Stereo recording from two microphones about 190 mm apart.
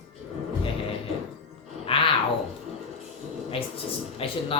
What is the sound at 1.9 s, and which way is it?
Roaring cats, 30° left (ahead or behind).